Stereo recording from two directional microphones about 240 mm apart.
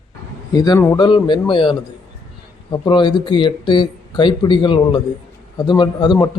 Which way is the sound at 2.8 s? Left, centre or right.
Centre.